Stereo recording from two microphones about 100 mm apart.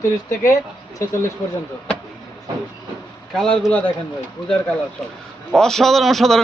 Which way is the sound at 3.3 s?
5° left (ahead or behind).